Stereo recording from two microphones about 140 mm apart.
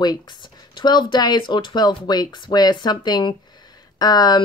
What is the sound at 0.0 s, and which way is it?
Speech, 30° left (ahead or behind).